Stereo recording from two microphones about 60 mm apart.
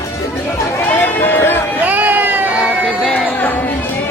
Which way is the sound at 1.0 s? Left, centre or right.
Left.